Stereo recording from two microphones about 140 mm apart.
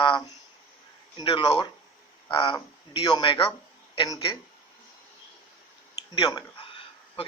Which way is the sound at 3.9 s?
25° left (ahead or behind).